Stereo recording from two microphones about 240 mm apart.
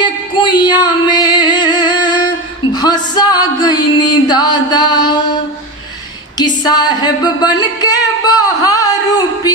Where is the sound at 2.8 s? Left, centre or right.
Centre.